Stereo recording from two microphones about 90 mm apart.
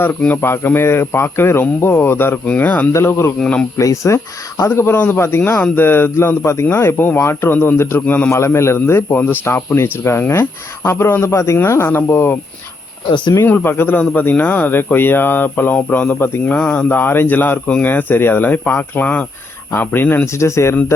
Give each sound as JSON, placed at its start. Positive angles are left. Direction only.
{"t": 0.4, "sound": "speech", "side_deg": 25}
{"t": 2.9, "sound": "speech", "side_deg": 30}
{"t": 3.4, "sound": "speech", "side_deg": 10}
{"t": 3.8, "sound": "speech", "side_deg": 35}
{"t": 8.3, "sound": "speech", "side_deg": 30}
{"t": 13.1, "sound": "speech", "side_deg": 60}
{"t": 13.4, "sound": "speech", "side_deg": 25}
{"t": 16.6, "sound": "speech", "side_deg": 15}